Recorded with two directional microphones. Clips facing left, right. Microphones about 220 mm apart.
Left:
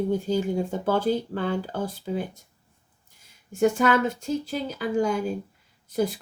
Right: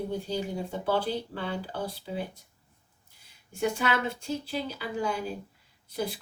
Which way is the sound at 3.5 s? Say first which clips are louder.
Left 7 dB; 45° left (ahead or behind).